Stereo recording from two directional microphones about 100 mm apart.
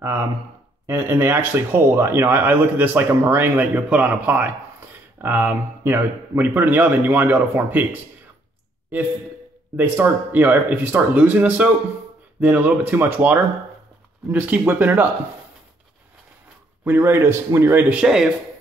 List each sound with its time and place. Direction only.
0.8 s speech: 25° right (ahead or behind)
9.8 s speech: 20° right (ahead or behind)
16.8 s speech: 25° right (ahead or behind); by 18.3 s 5° right (ahead or behind)